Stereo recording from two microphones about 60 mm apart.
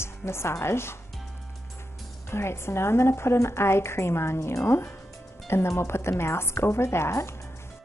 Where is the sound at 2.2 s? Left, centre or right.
Left.